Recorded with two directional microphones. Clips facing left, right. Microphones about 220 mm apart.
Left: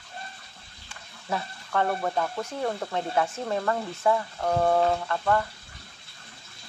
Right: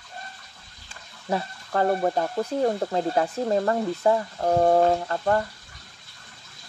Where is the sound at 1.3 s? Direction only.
35° right (ahead or behind).